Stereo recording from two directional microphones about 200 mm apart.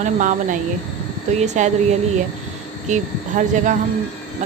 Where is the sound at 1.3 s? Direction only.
35° right (ahead or behind).